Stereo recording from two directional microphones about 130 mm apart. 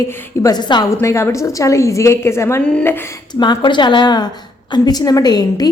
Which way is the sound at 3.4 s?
35° left (ahead or behind).